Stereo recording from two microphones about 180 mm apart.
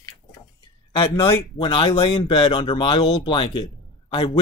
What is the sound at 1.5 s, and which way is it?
Speech, 30° left (ahead or behind).